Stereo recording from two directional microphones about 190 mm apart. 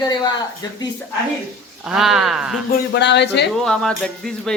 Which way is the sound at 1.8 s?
Centre (ahead or behind).